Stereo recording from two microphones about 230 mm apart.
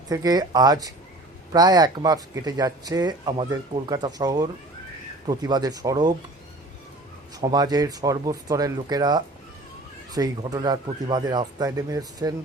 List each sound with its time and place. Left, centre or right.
0.1 s speech: centre
7.3 s speech: centre